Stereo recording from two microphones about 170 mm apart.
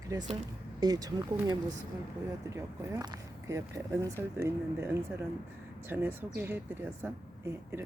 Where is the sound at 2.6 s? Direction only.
15° right (ahead or behind).